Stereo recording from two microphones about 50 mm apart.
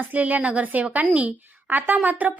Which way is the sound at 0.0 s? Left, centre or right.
Right.